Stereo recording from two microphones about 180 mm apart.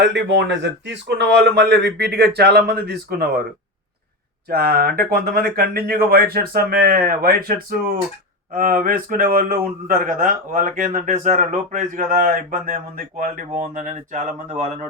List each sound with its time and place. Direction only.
0.0 s a man's voice: 80° right; by 3.4 s 60° right (ahead or behind)
4.4 s speech: 60° right (ahead or behind)